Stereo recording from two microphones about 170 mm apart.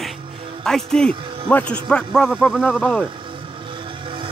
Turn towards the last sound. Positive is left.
turn(degrees=5)  # may be behind; listen again after turning